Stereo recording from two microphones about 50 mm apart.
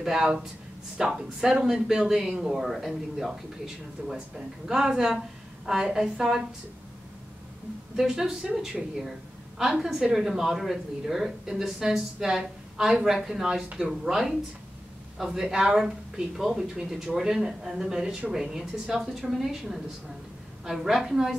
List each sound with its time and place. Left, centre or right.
0.0 s a woman's voice: centre
7.9 s a woman's voice: centre
9.6 s a woman's voice: centre
17.9 s speech: right
18.3 s a woman's voice: centre